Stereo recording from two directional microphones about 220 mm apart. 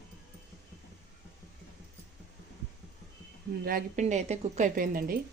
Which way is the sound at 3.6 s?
35° right (ahead or behind).